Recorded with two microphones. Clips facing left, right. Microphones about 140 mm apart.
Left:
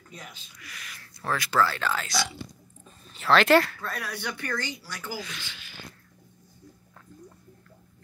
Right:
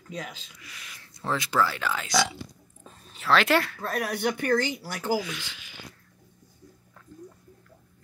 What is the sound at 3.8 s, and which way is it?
Speech, 55° right (ahead or behind).